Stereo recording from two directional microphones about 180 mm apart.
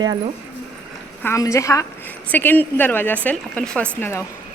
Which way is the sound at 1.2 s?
15° left (ahead or behind).